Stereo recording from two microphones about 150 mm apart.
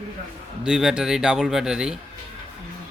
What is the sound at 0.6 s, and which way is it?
Speech, 5° right (ahead or behind).